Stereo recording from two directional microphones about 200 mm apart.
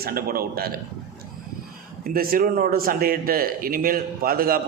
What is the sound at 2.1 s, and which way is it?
Speech, 45° right (ahead or behind).